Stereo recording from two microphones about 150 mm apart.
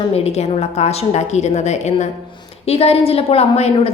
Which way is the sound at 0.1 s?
45° left (ahead or behind).